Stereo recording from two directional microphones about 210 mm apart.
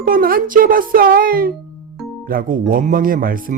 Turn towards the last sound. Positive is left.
turn(degrees=-40)  # may be behind; listen again after turning